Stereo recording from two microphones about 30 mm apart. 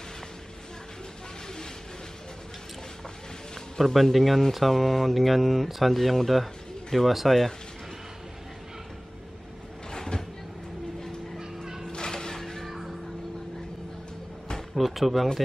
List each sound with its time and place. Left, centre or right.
3.8 s speech: centre
9.8 s vehicle: left
11.3 s fowl: centre
11.9 s music: left
14.8 s speech: centre